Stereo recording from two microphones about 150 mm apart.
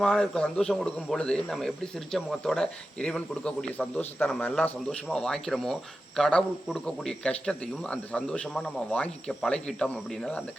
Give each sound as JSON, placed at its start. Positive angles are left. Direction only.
{"t": 0.0, "sound": "speech", "side_deg": 5}